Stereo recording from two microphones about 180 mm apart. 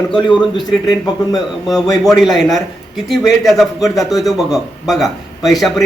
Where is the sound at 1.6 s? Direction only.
Centre (ahead or behind).